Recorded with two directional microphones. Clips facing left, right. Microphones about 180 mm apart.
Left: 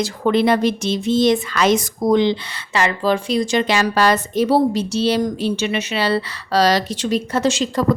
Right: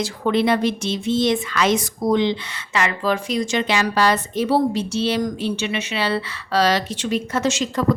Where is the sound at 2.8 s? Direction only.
30° left (ahead or behind).